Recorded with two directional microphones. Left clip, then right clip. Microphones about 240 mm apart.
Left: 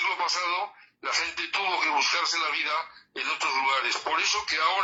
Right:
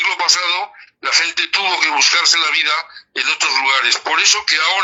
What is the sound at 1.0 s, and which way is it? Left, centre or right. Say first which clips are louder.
Speech: right 12 dB; right.